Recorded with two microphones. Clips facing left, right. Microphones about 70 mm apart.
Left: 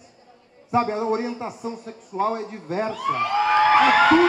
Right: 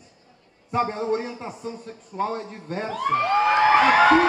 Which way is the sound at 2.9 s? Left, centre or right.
Right.